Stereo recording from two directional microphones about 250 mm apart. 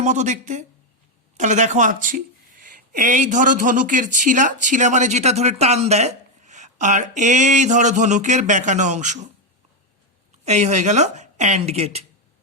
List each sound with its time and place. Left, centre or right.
0.0 s speech: right
10.4 s speech: right